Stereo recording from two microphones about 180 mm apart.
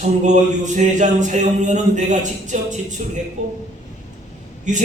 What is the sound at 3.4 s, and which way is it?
Speech, 40° right (ahead or behind).